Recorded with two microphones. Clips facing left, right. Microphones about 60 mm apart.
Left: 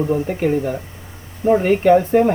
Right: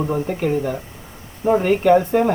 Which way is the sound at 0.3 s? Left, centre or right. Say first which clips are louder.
Left 2 dB; centre.